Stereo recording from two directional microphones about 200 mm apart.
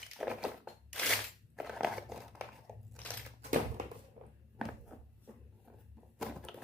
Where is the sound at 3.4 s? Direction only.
40° right (ahead or behind).